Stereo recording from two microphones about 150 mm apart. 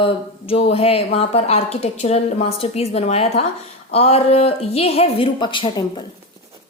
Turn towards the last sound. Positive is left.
turn(degrees=30)  # may be behind; listen again after turning